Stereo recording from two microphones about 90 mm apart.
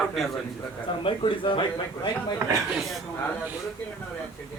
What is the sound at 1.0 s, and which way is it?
Speech, 70° left (ahead or behind).